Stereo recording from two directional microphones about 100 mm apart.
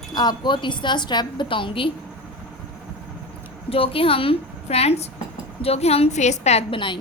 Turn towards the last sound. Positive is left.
turn(degrees=90)